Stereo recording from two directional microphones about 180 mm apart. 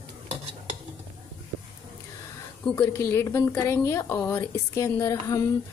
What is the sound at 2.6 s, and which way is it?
A woman's voice, 10° left (ahead or behind).